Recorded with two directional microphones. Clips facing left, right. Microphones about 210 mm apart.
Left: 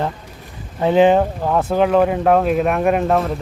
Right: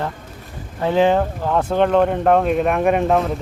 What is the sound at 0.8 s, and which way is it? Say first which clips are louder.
Speech: left 3 dB; 20° left (ahead or behind).